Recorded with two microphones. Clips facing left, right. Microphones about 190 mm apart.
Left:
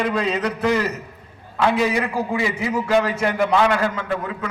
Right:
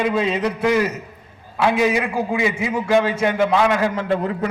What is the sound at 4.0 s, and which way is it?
Speech, 35° right (ahead or behind).